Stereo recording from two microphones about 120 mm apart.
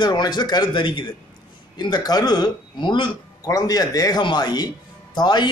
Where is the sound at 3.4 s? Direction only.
30° left (ahead or behind).